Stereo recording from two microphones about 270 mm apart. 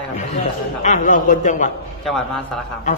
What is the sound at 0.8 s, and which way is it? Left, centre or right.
Speech, left.